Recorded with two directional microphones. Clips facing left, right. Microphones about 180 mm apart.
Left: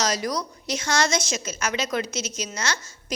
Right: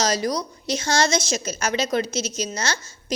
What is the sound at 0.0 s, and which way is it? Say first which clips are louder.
A woman's voice: right 3 dB; 30° right (ahead or behind).